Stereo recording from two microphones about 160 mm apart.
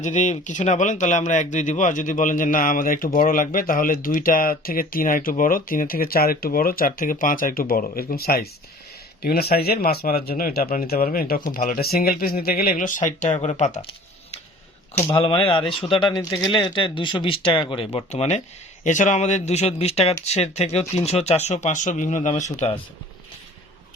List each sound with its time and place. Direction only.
0.0 s speech: 50° left (ahead or behind)
15.1 s speech: 35° left (ahead or behind)